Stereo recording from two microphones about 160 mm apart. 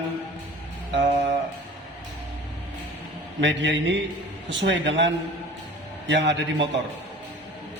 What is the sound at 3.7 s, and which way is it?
A man's voice, 90° right.